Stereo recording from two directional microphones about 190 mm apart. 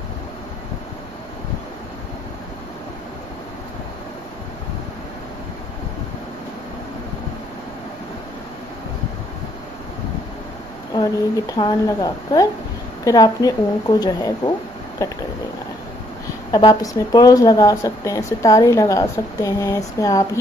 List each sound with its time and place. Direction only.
11.5 s speech: 20° left (ahead or behind)
16.5 s speech: 20° left (ahead or behind)